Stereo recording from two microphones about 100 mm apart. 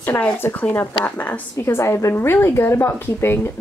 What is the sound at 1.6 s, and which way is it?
Speech, 30° left (ahead or behind).